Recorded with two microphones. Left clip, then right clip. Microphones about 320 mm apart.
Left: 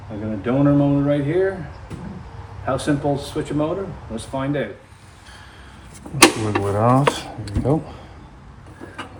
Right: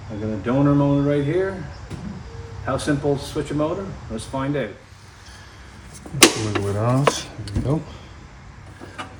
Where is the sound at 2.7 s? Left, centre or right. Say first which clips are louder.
Left 1 dB; centre.